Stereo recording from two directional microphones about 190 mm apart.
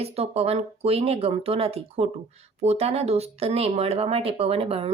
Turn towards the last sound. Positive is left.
turn(degrees=-30)  # may be behind; listen again after turning